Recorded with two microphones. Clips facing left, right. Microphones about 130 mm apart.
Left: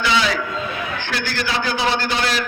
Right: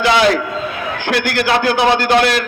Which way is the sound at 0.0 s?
65° right (ahead or behind).